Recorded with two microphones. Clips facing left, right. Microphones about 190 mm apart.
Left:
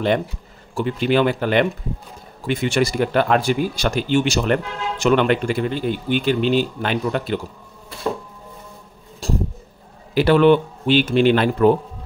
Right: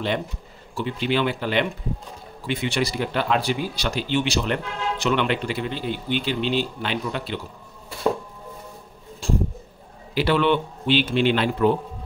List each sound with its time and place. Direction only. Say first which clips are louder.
0.7 s speech: left 5 dB; 45° left (ahead or behind)
9.2 s a sound: left 1 dB; 40° left (ahead or behind)
10.1 s speech: left 7 dB; 45° left (ahead or behind)